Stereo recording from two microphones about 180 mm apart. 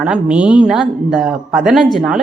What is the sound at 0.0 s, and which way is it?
Speech, 5° right (ahead or behind).